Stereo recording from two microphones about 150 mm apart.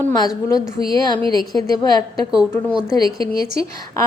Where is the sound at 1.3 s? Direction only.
25° left (ahead or behind).